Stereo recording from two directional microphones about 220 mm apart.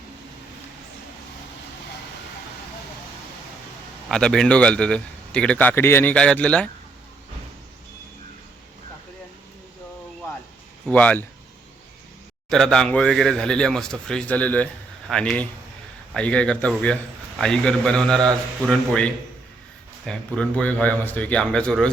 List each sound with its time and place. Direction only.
4.1 s speech: centre (ahead or behind)
10.8 s speech: 5° left (ahead or behind)
12.5 s speech: centre (ahead or behind)